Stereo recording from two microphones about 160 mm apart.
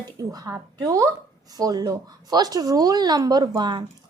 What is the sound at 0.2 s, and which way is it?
A woman's voice, 20° right (ahead or behind).